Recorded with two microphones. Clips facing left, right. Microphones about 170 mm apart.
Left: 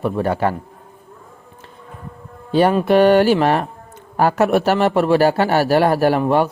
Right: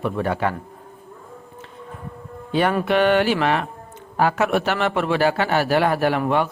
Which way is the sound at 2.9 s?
40° left (ahead or behind).